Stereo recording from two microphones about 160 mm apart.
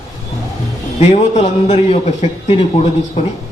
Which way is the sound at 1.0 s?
45° left (ahead or behind).